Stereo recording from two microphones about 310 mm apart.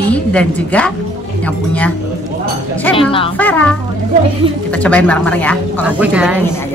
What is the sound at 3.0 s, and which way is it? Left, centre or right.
Speech, centre.